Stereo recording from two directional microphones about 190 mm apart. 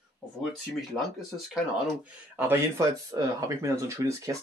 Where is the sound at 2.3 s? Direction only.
10° right (ahead or behind).